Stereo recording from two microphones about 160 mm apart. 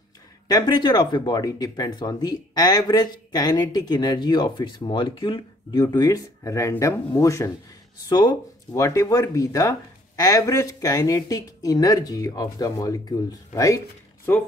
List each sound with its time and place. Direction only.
0.5 s speech: 25° left (ahead or behind)